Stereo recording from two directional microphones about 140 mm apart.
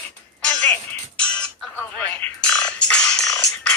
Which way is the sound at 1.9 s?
10° left (ahead or behind).